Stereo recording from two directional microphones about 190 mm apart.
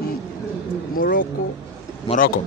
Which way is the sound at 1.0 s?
50° left (ahead or behind).